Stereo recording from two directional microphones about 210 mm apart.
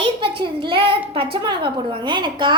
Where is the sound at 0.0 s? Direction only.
25° right (ahead or behind).